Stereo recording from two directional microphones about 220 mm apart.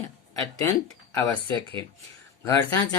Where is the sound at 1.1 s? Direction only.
10° left (ahead or behind).